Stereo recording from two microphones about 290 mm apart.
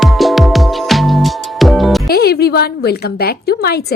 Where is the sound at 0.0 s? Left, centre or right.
Centre.